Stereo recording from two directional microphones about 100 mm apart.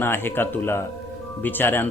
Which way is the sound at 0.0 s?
20° left (ahead or behind).